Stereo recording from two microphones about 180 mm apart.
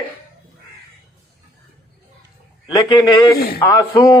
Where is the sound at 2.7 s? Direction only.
20° left (ahead or behind).